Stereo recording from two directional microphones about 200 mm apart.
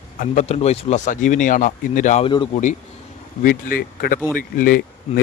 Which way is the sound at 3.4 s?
45° left (ahead or behind).